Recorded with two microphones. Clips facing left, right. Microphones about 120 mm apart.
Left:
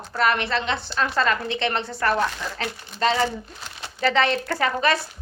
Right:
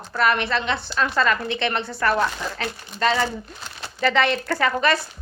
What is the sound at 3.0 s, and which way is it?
Speech, 30° left (ahead or behind).